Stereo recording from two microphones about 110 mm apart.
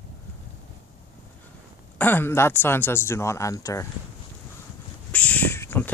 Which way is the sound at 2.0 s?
20° left (ahead or behind).